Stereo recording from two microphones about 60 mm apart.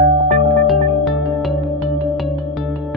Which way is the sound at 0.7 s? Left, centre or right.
Centre.